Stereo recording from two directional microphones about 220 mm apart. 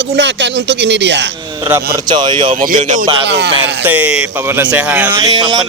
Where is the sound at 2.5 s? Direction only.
40° right (ahead or behind).